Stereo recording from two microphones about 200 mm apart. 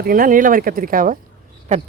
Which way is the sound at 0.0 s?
45° right (ahead or behind).